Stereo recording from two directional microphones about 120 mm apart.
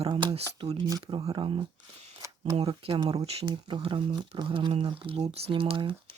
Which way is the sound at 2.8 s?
50° right (ahead or behind).